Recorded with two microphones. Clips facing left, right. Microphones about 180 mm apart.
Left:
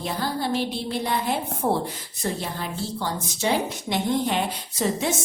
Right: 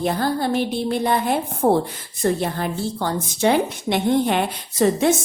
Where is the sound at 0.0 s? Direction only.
55° right (ahead or behind).